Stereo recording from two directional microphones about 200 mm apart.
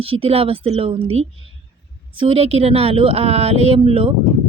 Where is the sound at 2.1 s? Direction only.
25° right (ahead or behind).